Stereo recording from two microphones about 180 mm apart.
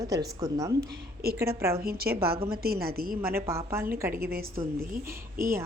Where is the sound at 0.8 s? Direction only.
60° right (ahead or behind).